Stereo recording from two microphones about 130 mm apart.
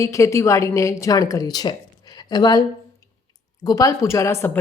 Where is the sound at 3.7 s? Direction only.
25° left (ahead or behind).